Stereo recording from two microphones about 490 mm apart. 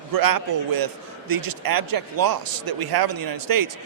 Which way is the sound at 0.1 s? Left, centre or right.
Right.